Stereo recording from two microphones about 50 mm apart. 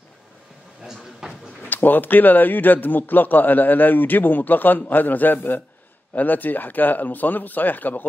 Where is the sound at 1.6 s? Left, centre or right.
Left.